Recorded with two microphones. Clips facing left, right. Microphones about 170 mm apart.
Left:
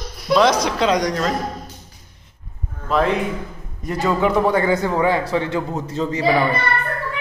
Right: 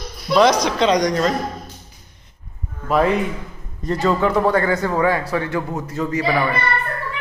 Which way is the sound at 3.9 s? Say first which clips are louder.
Right 1 dB; 10° left (ahead or behind).